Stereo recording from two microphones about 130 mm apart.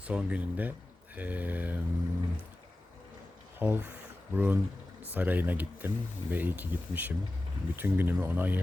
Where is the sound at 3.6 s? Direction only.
15° right (ahead or behind).